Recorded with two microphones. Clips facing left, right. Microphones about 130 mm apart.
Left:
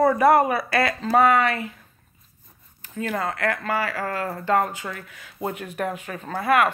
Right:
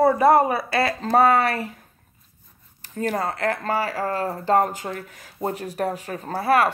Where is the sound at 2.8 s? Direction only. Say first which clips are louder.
Right 2 dB; 40° right (ahead or behind).